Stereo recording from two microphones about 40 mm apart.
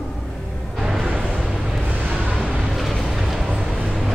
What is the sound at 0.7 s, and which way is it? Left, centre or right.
Music, centre.